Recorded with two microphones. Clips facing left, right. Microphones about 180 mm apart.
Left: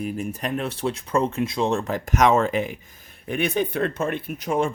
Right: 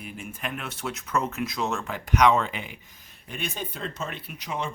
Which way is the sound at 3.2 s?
60° left (ahead or behind).